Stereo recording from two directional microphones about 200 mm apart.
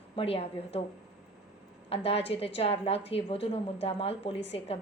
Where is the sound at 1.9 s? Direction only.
30° left (ahead or behind).